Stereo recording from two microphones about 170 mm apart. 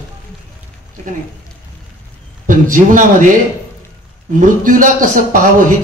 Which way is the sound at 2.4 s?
50° right (ahead or behind).